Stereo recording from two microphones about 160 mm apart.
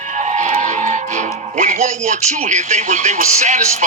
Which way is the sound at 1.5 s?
50° right (ahead or behind).